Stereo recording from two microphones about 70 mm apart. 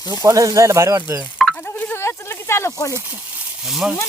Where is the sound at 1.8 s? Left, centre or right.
Left.